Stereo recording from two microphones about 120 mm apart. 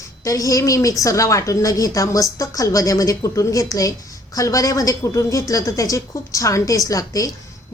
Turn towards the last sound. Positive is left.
turn(degrees=30)  # may be behind; listen again after turning